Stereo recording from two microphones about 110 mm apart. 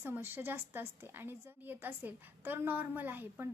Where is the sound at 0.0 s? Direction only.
20° right (ahead or behind).